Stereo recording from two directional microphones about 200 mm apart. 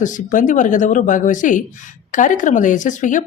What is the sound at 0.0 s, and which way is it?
Speech, 40° left (ahead or behind).